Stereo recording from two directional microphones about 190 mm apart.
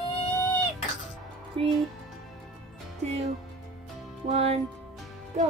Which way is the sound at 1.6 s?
30° right (ahead or behind).